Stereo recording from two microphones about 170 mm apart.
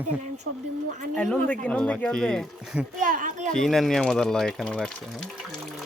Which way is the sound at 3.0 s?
50° right (ahead or behind).